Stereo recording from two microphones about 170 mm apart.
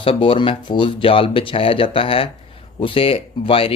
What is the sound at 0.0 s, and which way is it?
Speech, 30° left (ahead or behind).